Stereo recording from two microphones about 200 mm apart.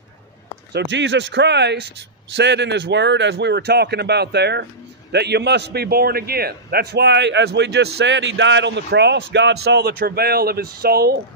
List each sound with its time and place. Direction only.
0.7 s a man's voice: 60° right (ahead or behind)